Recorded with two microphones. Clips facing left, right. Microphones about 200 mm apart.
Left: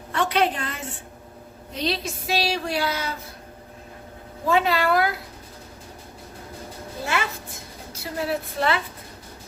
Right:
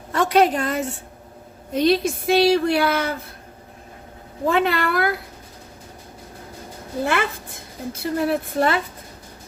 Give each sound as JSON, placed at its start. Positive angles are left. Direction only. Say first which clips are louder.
{"t": 0.1, "sound": "a woman's voice", "louder": "right 5 dB", "side_deg": -45}
{"t": 4.4, "sound": "a woman's voice", "louder": "right 1 dB", "side_deg": -55}
{"t": 7.0, "sound": "a woman's voice", "louder": "right 5 dB", "side_deg": -55}